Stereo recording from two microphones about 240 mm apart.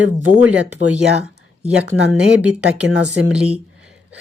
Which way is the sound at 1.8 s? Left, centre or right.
Centre.